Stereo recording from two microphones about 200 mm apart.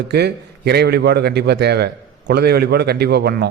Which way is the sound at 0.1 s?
55° right (ahead or behind).